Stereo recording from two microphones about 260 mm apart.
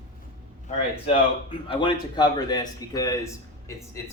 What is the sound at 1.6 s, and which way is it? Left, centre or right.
A man's voice, centre.